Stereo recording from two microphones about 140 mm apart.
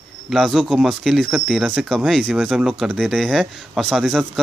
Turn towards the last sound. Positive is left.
turn(degrees=0)  # may be behind; listen again after turning